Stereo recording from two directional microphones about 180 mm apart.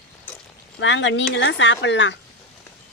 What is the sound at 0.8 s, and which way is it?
Speech, 90° left.